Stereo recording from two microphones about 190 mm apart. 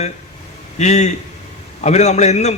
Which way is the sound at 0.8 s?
35° left (ahead or behind).